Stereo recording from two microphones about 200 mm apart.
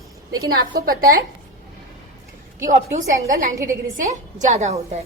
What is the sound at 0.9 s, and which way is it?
Speech, 45° right (ahead or behind).